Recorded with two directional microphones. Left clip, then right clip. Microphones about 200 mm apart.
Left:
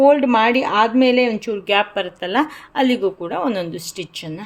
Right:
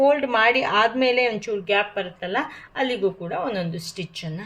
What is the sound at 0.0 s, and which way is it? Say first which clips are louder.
A woman's voice: left 5 dB; 35° left (ahead or behind).